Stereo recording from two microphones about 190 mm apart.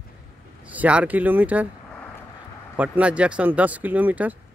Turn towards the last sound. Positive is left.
turn(degrees=-10)  # may be behind; listen again after turning